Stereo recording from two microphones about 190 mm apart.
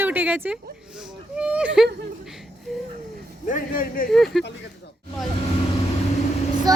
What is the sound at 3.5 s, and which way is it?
Speech, 45° left (ahead or behind).